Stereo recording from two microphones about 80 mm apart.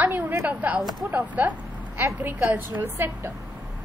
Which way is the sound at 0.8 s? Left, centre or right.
Centre.